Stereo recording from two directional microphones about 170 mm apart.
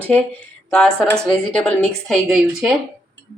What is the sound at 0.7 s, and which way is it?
A woman's voice, 5° left (ahead or behind).